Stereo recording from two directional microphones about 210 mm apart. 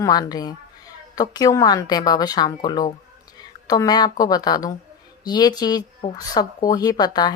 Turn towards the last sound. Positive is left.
turn(degrees=20)  # may be behind; listen again after turning